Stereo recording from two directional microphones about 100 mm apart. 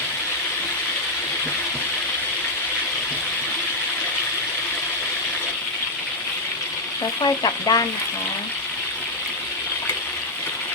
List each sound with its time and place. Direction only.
7.2 s speech: 45° left (ahead or behind)